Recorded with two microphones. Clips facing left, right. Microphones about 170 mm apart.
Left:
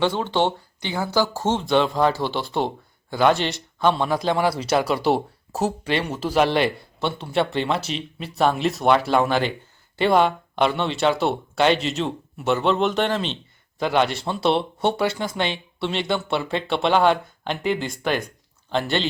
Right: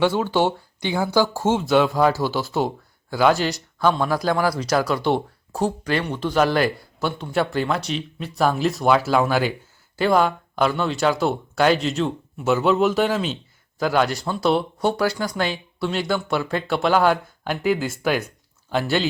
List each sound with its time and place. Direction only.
0.0 s speech: 5° right (ahead or behind)
4.1 s speech: 20° left (ahead or behind)
5.0 s speech: 5° left (ahead or behind)
14.1 s speech: 25° left (ahead or behind)
15.4 s speech: 5° right (ahead or behind)